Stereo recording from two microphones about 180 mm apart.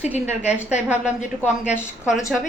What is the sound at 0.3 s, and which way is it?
Speech, 40° left (ahead or behind).